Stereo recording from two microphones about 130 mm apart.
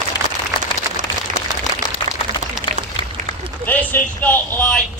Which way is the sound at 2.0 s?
35° left (ahead or behind).